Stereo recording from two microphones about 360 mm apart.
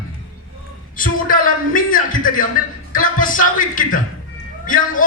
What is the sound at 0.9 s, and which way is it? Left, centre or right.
A man's voice, left.